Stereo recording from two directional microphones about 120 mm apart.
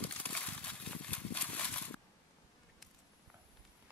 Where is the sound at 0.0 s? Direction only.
10° left (ahead or behind).